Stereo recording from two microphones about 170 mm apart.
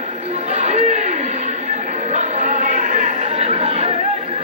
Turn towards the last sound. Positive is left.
turn(degrees=-40)  # may be behind; listen again after turning